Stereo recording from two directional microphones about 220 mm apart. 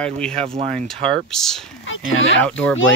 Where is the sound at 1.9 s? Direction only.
60° left (ahead or behind).